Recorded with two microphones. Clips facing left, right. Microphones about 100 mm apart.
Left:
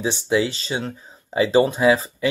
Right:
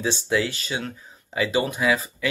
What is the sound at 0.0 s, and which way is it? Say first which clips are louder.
Speech: left 3 dB; 20° left (ahead or behind).